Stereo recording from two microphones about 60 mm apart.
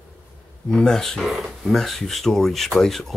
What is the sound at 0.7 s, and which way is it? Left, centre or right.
Speech, centre.